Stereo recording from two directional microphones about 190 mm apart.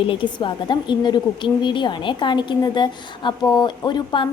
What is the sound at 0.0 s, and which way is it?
A woman's voice, 25° left (ahead or behind).